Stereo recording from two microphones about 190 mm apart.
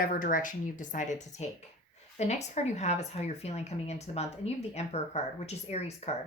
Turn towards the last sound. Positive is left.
turn(degrees=35)  # may be behind; listen again after turning